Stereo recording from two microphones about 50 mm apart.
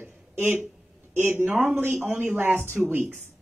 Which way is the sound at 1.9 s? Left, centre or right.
Right.